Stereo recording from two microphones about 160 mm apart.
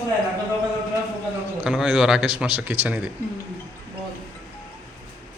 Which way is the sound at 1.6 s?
5° right (ahead or behind).